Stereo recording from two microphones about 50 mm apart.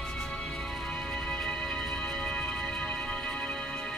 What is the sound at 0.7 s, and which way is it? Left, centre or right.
Music, centre.